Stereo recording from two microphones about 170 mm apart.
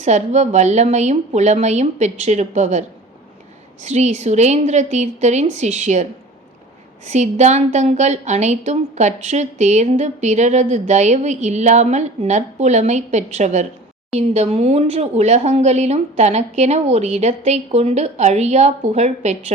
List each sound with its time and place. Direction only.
0.0 s a woman's voice: 45° right (ahead or behind)
3.8 s a woman's voice: 40° right (ahead or behind)